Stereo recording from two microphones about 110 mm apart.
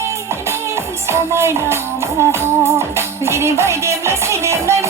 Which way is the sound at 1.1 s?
25° right (ahead or behind).